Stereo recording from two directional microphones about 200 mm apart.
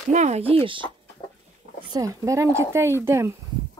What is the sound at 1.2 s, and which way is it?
Chicken, 30° left (ahead or behind).